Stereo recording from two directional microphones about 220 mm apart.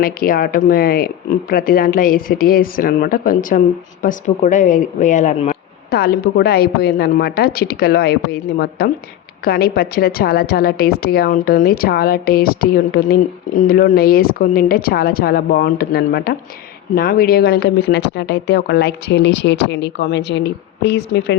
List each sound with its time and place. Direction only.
0.0 s speech: 40° left (ahead or behind)